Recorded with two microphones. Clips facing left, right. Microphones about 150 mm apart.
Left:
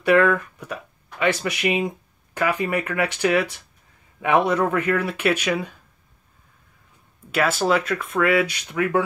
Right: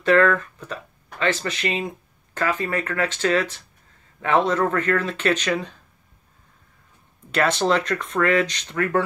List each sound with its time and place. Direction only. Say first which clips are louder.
0.0 s speech: even; 10° left (ahead or behind)
7.2 s speech: even; 5° left (ahead or behind)